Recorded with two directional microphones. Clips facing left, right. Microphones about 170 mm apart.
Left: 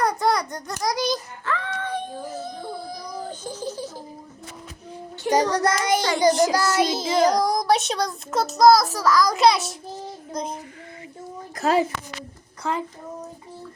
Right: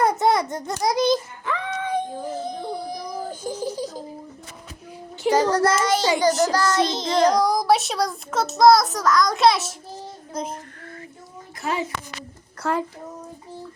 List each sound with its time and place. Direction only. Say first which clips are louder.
0.0 s a sound: right 3 dB; 25° right (ahead or behind)
5.3 s child singing: right 1 dB; 15° left (ahead or behind)
6.0 s a child's voice: right 2 dB; 10° right (ahead or behind)
6.2 s child singing: left 1 dB; 10° left (ahead or behind); by 10.6 s 5° right (ahead or behind)